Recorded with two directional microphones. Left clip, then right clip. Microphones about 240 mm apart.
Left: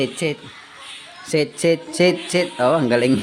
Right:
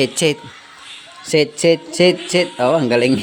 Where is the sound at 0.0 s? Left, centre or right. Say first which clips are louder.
Right 6 dB; right.